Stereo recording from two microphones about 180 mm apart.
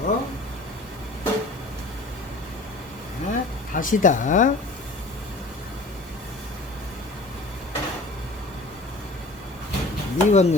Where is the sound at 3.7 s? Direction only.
45° left (ahead or behind).